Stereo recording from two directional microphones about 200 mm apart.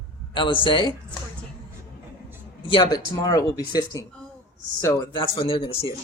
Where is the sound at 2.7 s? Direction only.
20° left (ahead or behind).